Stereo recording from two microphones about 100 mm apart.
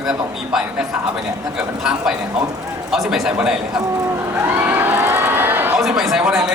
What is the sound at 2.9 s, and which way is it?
Speech, 5° right (ahead or behind).